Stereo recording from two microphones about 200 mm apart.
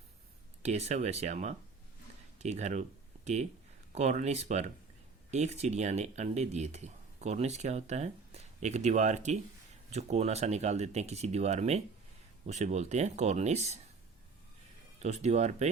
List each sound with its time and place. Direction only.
0.6 s speech: 35° right (ahead or behind)
3.9 s speech: 35° right (ahead or behind)
14.9 s speech: 35° right (ahead or behind)